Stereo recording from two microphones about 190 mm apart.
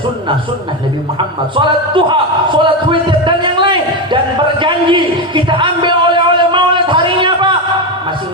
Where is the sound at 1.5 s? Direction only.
25° right (ahead or behind).